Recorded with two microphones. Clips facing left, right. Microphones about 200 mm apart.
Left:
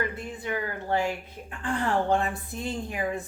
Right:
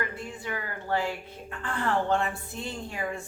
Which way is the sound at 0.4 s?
20° left (ahead or behind).